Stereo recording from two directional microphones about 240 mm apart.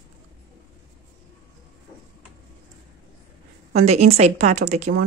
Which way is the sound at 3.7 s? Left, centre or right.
Right.